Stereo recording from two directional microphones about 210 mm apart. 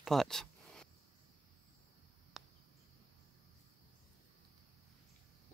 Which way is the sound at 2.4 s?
Centre (ahead or behind).